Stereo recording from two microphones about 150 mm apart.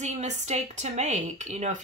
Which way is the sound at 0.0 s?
50° right (ahead or behind).